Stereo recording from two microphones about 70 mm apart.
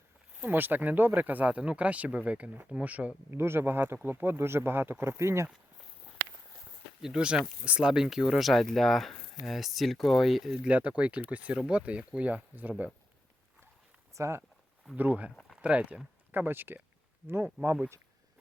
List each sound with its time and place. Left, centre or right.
0.3 s speech: right
3.3 s speech: right
7.0 s speech: centre
10.6 s speech: centre
14.1 s speech: right
14.9 s speech: right